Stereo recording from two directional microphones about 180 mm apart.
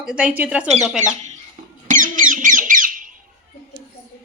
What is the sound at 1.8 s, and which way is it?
Music, 45° right (ahead or behind).